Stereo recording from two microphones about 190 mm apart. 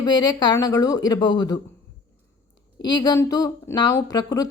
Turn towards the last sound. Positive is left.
turn(degrees=20)  # may be behind; listen again after turning